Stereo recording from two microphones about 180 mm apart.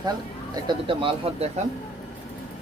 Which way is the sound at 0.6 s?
30° right (ahead or behind).